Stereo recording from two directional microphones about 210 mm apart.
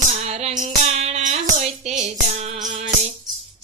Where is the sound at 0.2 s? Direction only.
30° right (ahead or behind).